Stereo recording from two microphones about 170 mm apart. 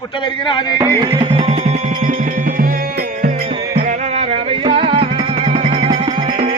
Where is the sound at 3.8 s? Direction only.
40° right (ahead or behind).